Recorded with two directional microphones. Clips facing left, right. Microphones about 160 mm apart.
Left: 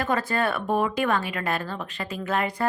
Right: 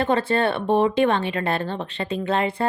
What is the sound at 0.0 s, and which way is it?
Speech, 25° right (ahead or behind).